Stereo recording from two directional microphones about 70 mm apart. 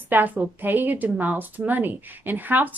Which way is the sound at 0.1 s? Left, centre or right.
Right.